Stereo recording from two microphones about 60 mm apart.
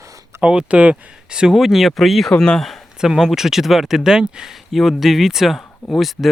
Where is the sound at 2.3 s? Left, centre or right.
Centre.